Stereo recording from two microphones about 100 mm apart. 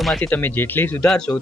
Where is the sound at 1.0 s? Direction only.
5° left (ahead or behind).